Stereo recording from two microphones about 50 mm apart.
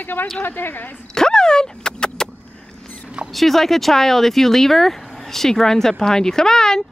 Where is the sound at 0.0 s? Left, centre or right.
Left.